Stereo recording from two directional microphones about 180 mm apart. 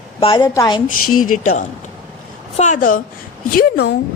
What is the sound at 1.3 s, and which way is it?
A woman's voice, 45° left (ahead or behind).